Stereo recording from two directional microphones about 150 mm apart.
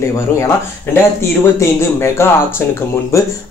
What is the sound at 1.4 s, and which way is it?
Speech, 20° left (ahead or behind).